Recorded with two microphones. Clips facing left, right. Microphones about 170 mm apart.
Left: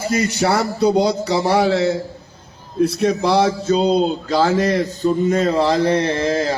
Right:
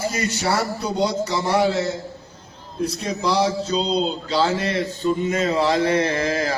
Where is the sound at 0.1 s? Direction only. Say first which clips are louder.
Left 5 dB; 75° left (ahead or behind).